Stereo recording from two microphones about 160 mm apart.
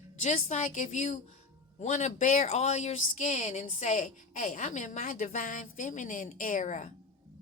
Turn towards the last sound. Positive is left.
turn(degrees=50)  # may be behind; listen again after turning